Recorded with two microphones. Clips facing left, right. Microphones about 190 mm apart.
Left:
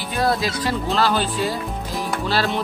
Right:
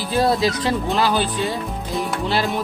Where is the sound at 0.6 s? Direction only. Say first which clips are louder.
Right 1 dB; 20° right (ahead or behind).